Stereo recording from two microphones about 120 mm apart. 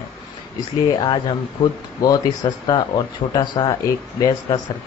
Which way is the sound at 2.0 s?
35° left (ahead or behind).